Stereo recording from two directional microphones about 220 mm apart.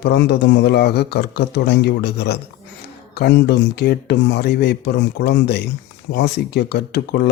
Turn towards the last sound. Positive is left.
turn(degrees=50)  # may be behind; listen again after turning